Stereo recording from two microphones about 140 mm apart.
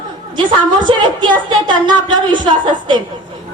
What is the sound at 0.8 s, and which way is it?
A woman's voice, 35° right (ahead or behind).